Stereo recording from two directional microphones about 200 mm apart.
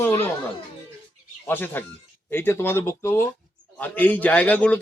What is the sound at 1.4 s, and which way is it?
A man's voice, 10° left (ahead or behind).